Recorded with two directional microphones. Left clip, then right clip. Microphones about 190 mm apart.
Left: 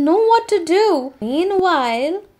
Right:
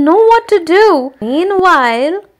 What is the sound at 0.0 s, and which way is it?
Speech, 15° right (ahead or behind).